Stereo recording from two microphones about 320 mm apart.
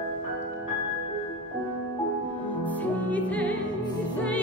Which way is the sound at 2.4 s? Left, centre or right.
Centre.